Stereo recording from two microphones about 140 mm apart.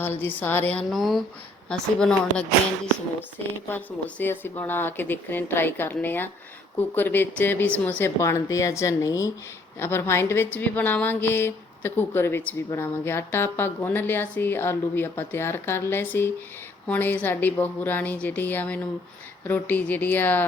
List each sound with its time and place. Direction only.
0.0 s a woman's voice: 15° left (ahead or behind)
0.9 s speech: centre (ahead or behind)
3.7 s a woman's voice: 15° left (ahead or behind)